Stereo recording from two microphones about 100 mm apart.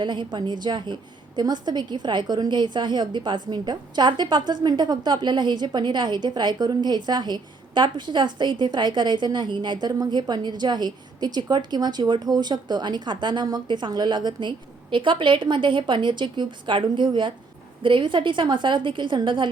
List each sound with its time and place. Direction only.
0.0 s a woman's voice: 50° right (ahead or behind)